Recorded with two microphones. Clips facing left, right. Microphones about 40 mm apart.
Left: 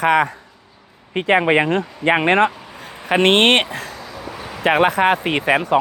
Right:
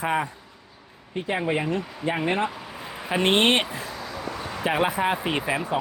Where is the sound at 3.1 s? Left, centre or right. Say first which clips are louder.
Left 7 dB; left.